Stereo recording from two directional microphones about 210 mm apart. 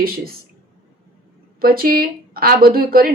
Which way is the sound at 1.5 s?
45° right (ahead or behind).